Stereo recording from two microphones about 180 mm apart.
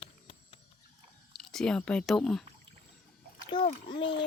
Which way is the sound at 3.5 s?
25° left (ahead or behind).